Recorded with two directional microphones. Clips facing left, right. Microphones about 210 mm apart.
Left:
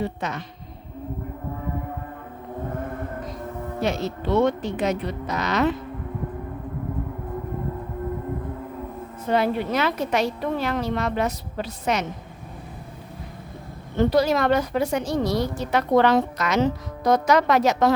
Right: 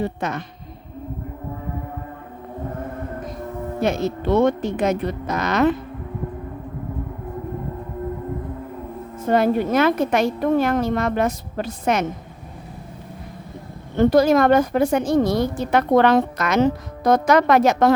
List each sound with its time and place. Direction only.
0.0 s a woman's voice: 50° right (ahead or behind)
3.8 s a woman's voice: 50° right (ahead or behind)
9.2 s a woman's voice: 45° right (ahead or behind)
14.0 s a woman's voice: 50° right (ahead or behind)